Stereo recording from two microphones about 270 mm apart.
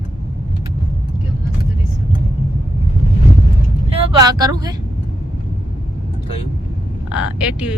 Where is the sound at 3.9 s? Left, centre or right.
Right.